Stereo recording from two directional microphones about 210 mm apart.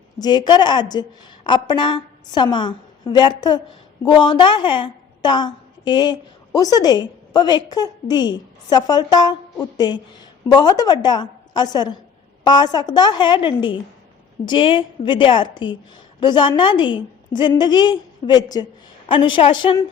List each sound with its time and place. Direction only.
0.2 s a woman's voice: 20° left (ahead or behind)